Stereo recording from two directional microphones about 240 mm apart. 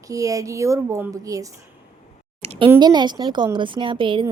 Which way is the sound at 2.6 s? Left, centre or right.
Centre.